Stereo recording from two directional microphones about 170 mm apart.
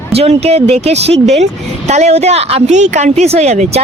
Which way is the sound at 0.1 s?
35° right (ahead or behind).